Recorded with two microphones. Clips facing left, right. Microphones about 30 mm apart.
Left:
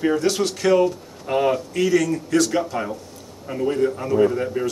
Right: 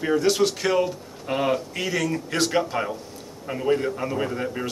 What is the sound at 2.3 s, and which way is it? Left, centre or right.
Speech, right.